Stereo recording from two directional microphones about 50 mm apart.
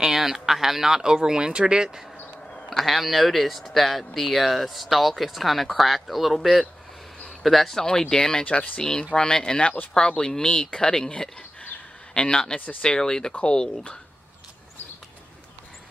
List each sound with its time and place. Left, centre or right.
0.0 s speech: centre
2.7 s speech: centre